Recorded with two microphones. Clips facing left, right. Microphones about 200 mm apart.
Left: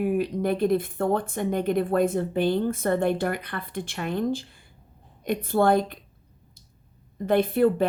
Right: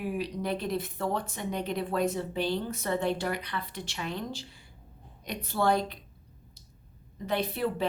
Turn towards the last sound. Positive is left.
turn(degrees=50)  # may be behind; listen again after turning